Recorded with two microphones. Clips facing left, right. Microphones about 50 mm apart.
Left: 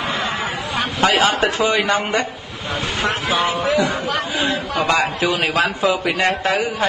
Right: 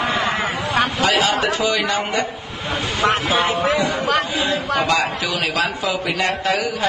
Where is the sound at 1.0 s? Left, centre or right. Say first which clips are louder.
Left 6 dB; left.